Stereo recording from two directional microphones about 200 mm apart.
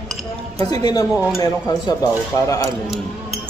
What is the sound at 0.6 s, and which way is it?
Speech, 20° left (ahead or behind).